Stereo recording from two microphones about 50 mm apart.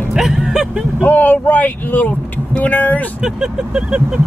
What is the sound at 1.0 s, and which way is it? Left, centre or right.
Speech, left.